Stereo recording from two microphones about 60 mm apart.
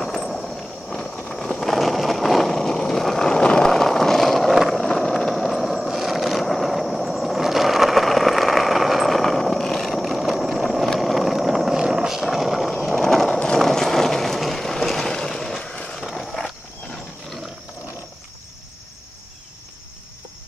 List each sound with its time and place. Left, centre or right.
0.0 s vehicle: centre
15.6 s a sound: centre
16.1 s wild animals: centre